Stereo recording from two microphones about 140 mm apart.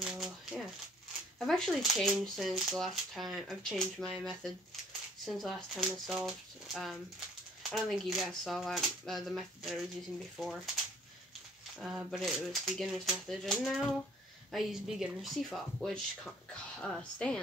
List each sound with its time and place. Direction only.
0.0 s shuffling cards: 5° right (ahead or behind)
1.4 s speech: centre (ahead or behind)
12.1 s speech: centre (ahead or behind)